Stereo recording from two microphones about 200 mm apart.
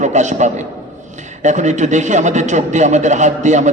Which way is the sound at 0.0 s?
35° right (ahead or behind).